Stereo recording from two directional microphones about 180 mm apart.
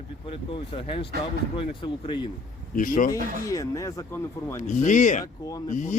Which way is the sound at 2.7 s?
50° left (ahead or behind).